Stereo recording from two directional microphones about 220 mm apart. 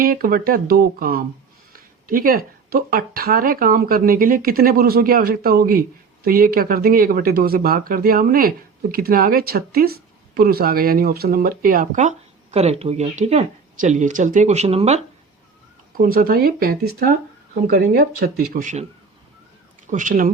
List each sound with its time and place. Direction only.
0.0 s speech: 40° right (ahead or behind)
16.0 s speech: 40° right (ahead or behind)
19.9 s speech: 35° right (ahead or behind)